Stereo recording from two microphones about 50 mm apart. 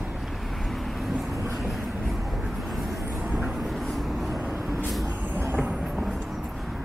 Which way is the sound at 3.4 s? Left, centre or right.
Centre.